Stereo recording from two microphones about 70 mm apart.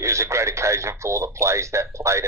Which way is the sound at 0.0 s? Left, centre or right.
Right.